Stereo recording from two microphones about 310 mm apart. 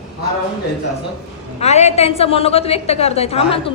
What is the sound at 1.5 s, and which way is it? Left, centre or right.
A woman's voice, left.